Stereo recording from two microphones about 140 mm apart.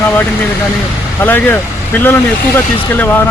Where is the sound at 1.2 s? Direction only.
15° left (ahead or behind).